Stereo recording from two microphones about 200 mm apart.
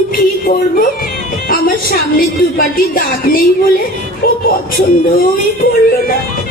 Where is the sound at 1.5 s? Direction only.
45° left (ahead or behind).